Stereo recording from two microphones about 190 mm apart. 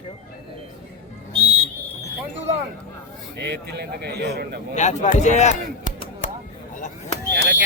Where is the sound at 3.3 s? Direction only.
60° right (ahead or behind).